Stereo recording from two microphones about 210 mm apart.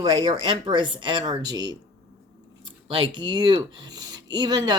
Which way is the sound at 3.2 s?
20° right (ahead or behind).